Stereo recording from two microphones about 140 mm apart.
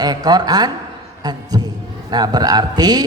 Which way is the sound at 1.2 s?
30° right (ahead or behind).